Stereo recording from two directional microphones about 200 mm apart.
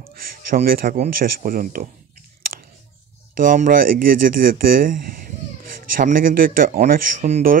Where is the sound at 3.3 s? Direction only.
45° right (ahead or behind).